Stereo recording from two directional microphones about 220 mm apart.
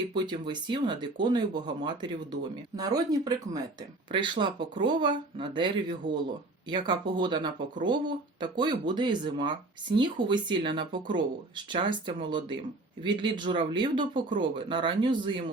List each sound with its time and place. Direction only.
0.1 s speech: 20° right (ahead or behind)